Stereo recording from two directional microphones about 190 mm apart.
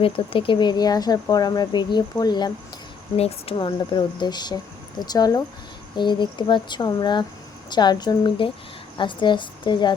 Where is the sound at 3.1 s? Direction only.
30° left (ahead or behind).